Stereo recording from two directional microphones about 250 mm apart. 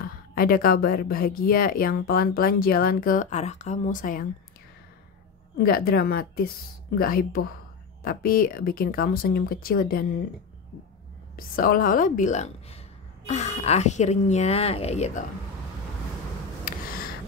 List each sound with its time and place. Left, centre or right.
0.0 s speech: left
5.6 s speech: left
11.3 s speech: left
16.7 s a sound: left